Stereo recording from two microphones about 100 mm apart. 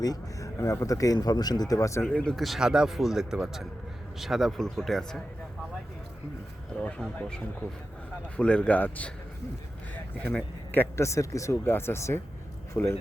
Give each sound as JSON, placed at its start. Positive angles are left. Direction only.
{"t": 0.0, "sound": "speech", "side_deg": 35}
{"t": 2.0, "sound": "speech", "side_deg": 10}
{"t": 6.7, "sound": "a man's voice", "side_deg": 10}